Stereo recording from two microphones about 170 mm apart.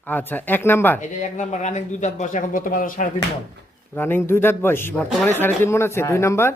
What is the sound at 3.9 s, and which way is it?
Speech, 15° left (ahead or behind).